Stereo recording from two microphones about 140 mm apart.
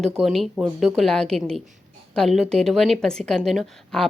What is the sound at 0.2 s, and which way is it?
A woman's voice, centre (ahead or behind).